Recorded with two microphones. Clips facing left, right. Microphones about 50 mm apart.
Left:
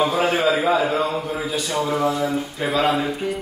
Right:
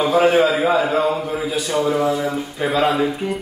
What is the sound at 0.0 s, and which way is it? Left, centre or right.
A man's voice, centre.